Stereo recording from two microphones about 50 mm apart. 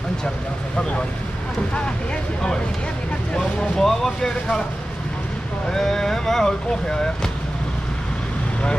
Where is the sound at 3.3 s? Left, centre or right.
Centre.